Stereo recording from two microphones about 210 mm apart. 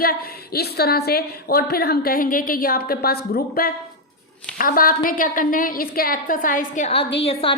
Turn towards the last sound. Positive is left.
turn(degrees=25)  # may be behind; listen again after turning